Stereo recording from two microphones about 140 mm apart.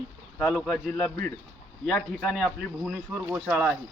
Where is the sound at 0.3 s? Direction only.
5° left (ahead or behind).